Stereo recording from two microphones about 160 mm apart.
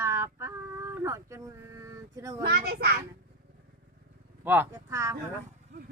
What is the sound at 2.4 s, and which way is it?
Speech, 80° right.